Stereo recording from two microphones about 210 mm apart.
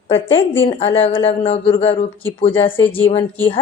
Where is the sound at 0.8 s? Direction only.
25° left (ahead or behind).